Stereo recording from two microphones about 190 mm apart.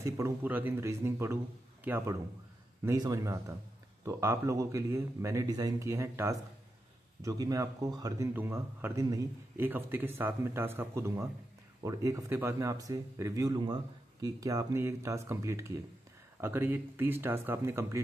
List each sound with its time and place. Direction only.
0.0 s a man's voice: 10° right (ahead or behind)